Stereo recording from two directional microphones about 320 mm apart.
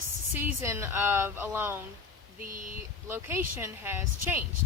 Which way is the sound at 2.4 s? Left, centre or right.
Right.